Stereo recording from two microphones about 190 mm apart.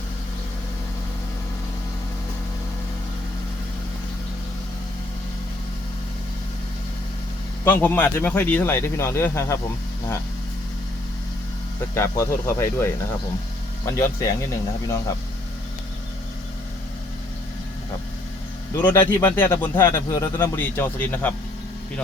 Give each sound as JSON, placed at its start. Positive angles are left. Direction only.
{"t": 7.6, "sound": "speech", "side_deg": 10}
{"t": 11.9, "sound": "speech", "side_deg": 15}
{"t": 18.9, "sound": "speech", "side_deg": 10}